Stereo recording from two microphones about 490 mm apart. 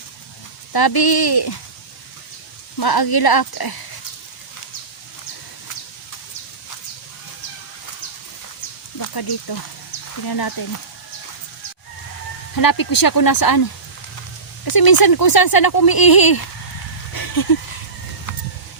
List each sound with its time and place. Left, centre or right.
0.7 s speech: left
2.7 s speech: left
9.0 s speech: left
12.5 s speech: left
14.6 s speech: left
17.2 s a sound: left